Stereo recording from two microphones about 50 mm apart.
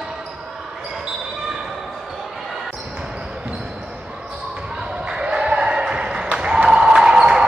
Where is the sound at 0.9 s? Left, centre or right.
Centre.